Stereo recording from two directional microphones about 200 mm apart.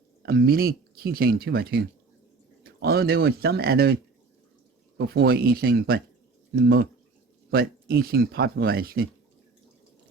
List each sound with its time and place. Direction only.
0.2 s speech: 50° right (ahead or behind)
4.9 s speech: 50° right (ahead or behind)